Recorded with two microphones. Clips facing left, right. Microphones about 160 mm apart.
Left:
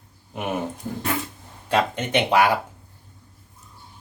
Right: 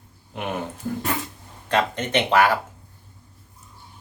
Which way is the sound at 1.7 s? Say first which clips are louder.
Even; 10° left (ahead or behind).